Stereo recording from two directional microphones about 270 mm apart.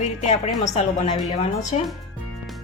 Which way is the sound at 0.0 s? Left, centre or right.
Left.